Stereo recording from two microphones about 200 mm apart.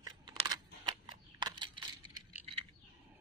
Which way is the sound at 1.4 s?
20° right (ahead or behind).